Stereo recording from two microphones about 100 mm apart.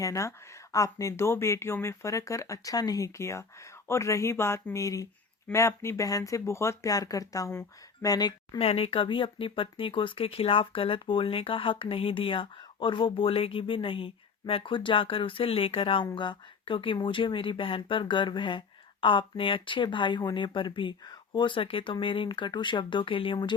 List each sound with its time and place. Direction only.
0.0 s speech: 30° left (ahead or behind)
8.5 s speech: 75° left (ahead or behind)
16.1 s speech: 50° left (ahead or behind)